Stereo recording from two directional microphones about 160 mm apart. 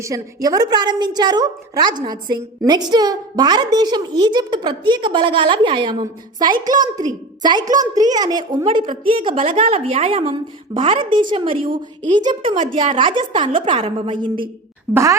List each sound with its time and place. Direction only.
0.0 s a woman's voice: 20° right (ahead or behind)
14.9 s a woman's voice: 20° right (ahead or behind)